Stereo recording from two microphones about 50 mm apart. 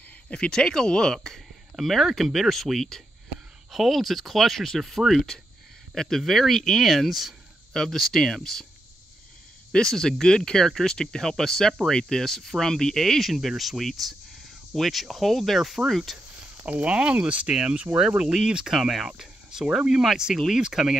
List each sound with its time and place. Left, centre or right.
0.3 s speech: centre
9.7 s speech: centre
16.3 s speech: right; by 18.8 s centre
18.8 s speech: centre
19.0 s cricket: centre
19.9 s speech: centre